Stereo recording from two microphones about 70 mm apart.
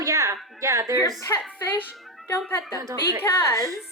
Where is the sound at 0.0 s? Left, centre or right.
Right.